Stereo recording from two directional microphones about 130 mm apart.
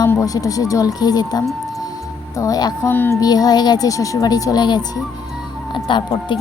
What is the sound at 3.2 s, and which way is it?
A woman's voice, 30° left (ahead or behind).